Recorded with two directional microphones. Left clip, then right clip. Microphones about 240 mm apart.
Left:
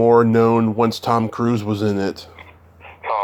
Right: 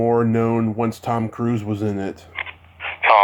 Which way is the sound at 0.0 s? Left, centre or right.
Centre.